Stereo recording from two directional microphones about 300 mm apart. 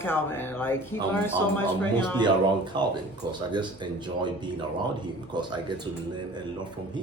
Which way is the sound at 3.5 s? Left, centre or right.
Centre.